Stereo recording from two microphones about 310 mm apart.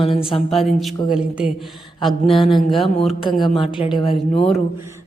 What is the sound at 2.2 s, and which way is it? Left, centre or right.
A woman's voice, centre.